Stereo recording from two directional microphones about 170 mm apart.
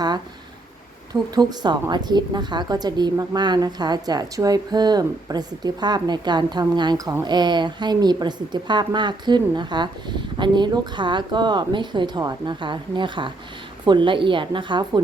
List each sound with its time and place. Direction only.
1.4 s a woman's voice: 25° right (ahead or behind)